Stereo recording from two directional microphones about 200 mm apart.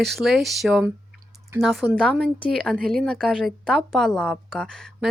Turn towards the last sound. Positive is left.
turn(degrees=5)  # may be behind; listen again after turning